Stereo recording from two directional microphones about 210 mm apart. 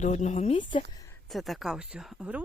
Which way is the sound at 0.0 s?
35° left (ahead or behind).